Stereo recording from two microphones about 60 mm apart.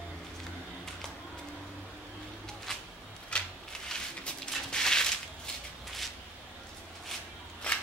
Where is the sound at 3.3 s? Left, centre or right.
Centre.